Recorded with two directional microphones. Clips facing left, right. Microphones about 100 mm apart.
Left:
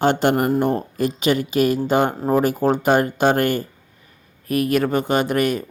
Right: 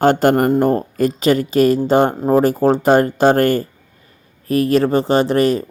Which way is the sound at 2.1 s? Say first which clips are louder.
Right 4 dB; 20° right (ahead or behind).